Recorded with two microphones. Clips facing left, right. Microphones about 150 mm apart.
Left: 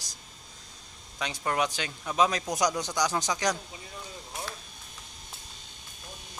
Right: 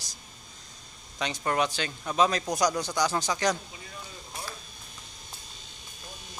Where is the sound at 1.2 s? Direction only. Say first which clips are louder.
Right 1 dB; 5° left (ahead or behind).